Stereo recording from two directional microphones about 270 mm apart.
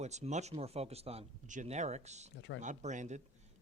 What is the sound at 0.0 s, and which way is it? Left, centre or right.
Speech, right.